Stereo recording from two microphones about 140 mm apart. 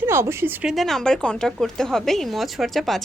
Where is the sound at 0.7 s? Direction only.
Centre (ahead or behind).